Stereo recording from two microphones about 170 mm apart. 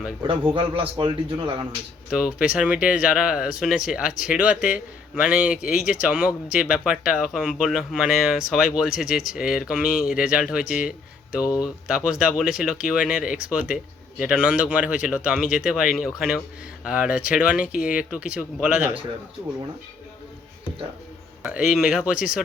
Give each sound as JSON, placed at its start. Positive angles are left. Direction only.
{"t": 0.2, "sound": "speech", "side_deg": -30}
{"t": 2.0, "sound": "speech", "side_deg": -5}
{"t": 21.4, "sound": "speech", "side_deg": -5}